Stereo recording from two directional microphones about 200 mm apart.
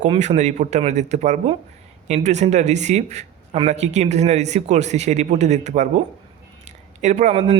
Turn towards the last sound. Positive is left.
turn(degrees=-30)  # may be behind; listen again after turning